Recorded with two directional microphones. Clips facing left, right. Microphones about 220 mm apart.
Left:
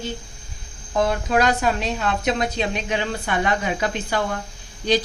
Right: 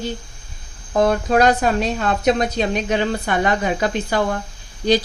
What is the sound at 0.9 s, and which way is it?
A woman's voice, 45° right (ahead or behind).